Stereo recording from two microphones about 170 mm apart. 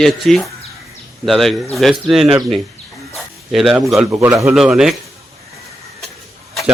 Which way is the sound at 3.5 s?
Centre (ahead or behind).